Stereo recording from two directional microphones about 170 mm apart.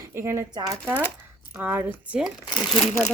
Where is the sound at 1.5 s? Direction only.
10° right (ahead or behind).